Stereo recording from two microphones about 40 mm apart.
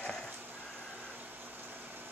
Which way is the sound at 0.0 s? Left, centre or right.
Centre.